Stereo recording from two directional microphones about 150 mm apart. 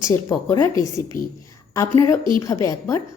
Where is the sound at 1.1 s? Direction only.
65° left (ahead or behind).